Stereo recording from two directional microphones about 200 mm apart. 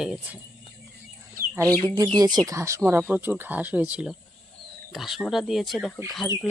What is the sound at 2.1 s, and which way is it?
Speech, 20° right (ahead or behind).